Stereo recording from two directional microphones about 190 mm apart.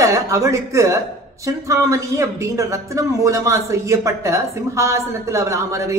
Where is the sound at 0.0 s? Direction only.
15° right (ahead or behind).